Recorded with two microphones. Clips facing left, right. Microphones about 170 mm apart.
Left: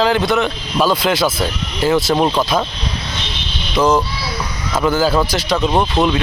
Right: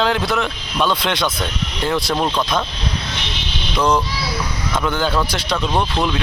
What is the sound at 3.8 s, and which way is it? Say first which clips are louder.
Speech: left 3 dB; 5° left (ahead or behind).